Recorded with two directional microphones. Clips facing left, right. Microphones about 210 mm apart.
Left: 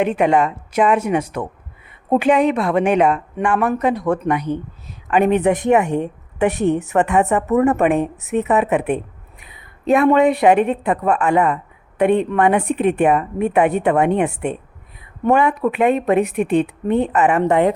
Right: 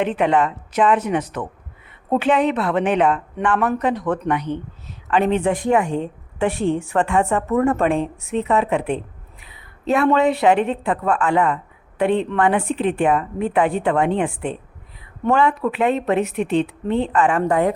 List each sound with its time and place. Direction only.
0.0 s a woman's voice: 10° left (ahead or behind)
8.6 s a woman's voice: 5° left (ahead or behind)
12.6 s speech: 60° left (ahead or behind)
13.0 s a woman's voice: 20° left (ahead or behind)
15.2 s a woman's voice: 15° left (ahead or behind)
17.1 s a woman's voice: 20° left (ahead or behind)